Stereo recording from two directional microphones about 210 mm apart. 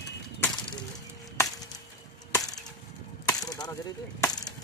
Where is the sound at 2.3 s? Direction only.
15° left (ahead or behind).